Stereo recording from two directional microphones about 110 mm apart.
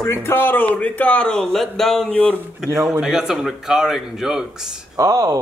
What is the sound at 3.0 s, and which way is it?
Speech, 5° right (ahead or behind).